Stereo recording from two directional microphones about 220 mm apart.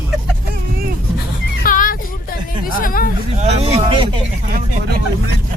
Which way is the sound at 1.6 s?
40° left (ahead or behind).